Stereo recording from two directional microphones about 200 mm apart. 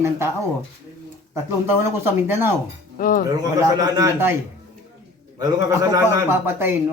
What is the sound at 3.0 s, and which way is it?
Speech, 45° left (ahead or behind).